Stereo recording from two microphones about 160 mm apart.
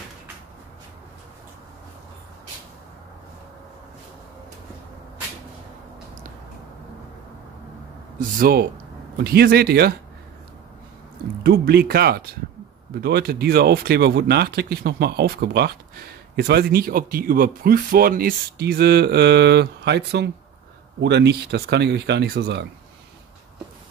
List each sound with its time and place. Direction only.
8.4 s speech: 70° right (ahead or behind)
9.2 s speech: 80° right
11.4 s speech: 80° right